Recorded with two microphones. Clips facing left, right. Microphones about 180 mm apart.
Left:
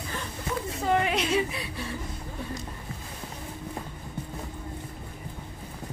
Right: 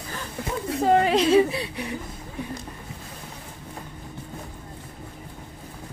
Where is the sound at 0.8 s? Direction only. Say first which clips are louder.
Right 7 dB; 35° right (ahead or behind).